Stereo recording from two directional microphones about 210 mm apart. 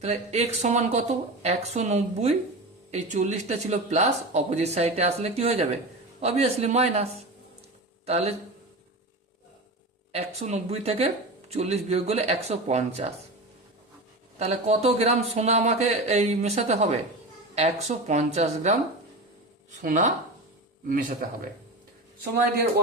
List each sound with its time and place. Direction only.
0.0 s speech: 30° right (ahead or behind)
10.1 s speech: 30° right (ahead or behind)
14.3 s speech: 30° right (ahead or behind)
19.8 s speech: 35° right (ahead or behind)